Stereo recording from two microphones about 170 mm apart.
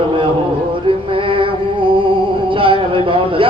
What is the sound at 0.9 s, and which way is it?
Music, 30° right (ahead or behind).